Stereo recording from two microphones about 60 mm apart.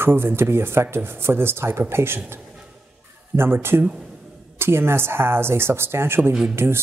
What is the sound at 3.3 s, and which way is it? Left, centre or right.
Speech, right.